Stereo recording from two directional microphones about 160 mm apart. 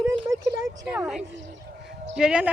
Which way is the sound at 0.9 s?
5° right (ahead or behind).